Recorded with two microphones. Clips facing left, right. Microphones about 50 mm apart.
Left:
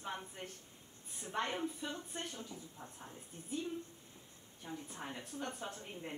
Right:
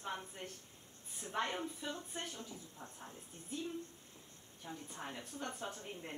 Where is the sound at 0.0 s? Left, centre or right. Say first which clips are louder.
Even; centre.